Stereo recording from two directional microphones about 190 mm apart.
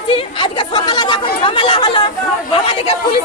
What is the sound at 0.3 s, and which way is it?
Speech, 25° left (ahead or behind).